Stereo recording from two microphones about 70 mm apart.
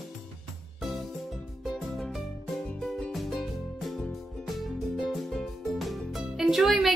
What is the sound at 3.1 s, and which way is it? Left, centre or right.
Music, centre.